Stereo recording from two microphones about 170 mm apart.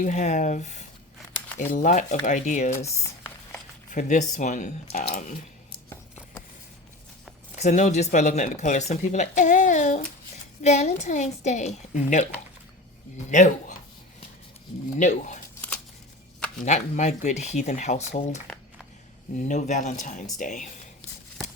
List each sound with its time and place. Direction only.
0.0 s speech: 45° left (ahead or behind)
2.7 s speech: 15° left (ahead or behind)
3.9 s speech: 45° left (ahead or behind)
7.5 s speech: 45° left (ahead or behind)
13.3 s speech: 45° left (ahead or behind)
14.9 s speech: 45° left (ahead or behind)
16.6 s speech: 45° left (ahead or behind)
18.4 s a sound: 5° left (ahead or behind)
19.4 s speech: 45° left (ahead or behind)